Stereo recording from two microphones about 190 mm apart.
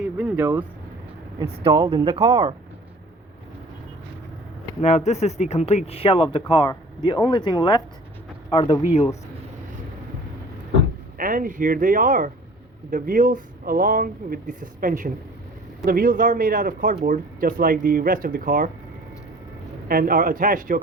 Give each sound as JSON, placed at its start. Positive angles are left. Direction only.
{"t": 0.2, "sound": "speech", "side_deg": -10}
{"t": 1.5, "sound": "speech", "side_deg": -25}
{"t": 4.8, "sound": "speech", "side_deg": 35}
{"t": 11.2, "sound": "speech", "side_deg": -45}
{"t": 19.9, "sound": "speech", "side_deg": -50}